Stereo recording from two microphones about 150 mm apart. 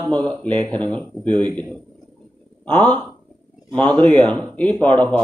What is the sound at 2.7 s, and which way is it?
Speech, 30° right (ahead or behind).